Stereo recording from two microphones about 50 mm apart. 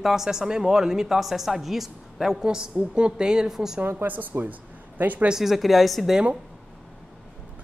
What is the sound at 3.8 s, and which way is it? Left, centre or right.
Speech, right.